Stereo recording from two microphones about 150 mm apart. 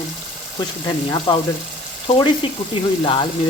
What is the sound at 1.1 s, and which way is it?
Speech, 30° left (ahead or behind).